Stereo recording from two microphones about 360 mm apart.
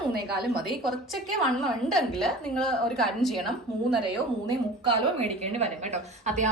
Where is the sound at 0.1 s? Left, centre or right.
Right.